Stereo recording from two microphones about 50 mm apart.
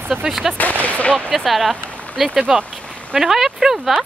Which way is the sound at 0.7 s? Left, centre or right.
Right.